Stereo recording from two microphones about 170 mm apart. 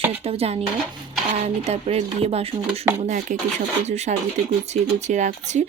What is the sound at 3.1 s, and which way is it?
Speech, 45° right (ahead or behind).